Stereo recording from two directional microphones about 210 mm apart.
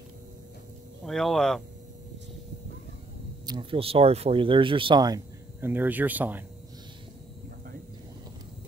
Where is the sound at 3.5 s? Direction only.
25° right (ahead or behind); by 6.4 s 10° right (ahead or behind).